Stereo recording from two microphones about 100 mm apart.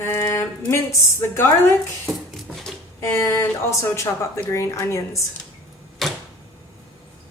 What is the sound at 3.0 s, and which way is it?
Speech, 30° left (ahead or behind).